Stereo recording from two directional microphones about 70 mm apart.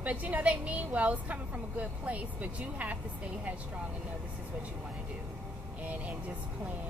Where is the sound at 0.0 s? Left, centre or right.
Right.